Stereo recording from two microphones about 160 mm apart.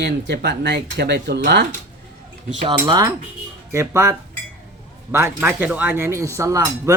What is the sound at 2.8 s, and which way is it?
Speech, 25° right (ahead or behind).